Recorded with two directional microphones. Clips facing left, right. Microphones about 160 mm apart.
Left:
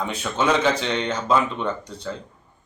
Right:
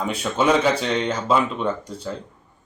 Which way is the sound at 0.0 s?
10° right (ahead or behind).